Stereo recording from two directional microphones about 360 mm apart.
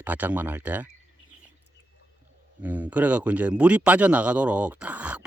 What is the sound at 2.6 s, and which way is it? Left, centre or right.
A man's voice, centre.